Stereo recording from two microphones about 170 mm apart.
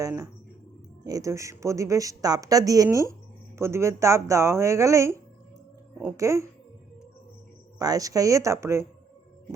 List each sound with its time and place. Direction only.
0.0 s speech: 20° right (ahead or behind)
7.8 s speech: 20° right (ahead or behind)